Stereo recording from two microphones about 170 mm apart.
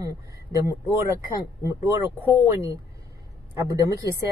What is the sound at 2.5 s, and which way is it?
Speech, 15° right (ahead or behind).